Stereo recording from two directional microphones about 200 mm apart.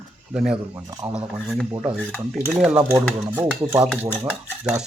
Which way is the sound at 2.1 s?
5° left (ahead or behind).